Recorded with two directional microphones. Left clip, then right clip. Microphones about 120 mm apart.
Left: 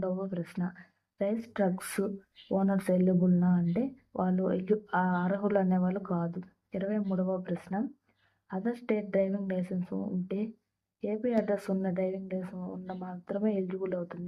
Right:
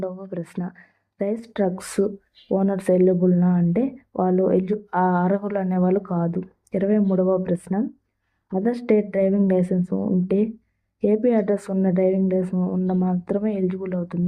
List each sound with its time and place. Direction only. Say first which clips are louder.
0.1 s speech: right 3 dB; 30° right (ahead or behind)
7.1 s speech: right 12 dB; 30° right (ahead or behind)
12.5 s speech: right 15 dB; 25° right (ahead or behind)